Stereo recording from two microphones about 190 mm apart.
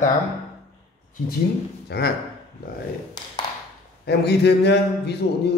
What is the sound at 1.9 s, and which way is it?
Speech, 60° left (ahead or behind).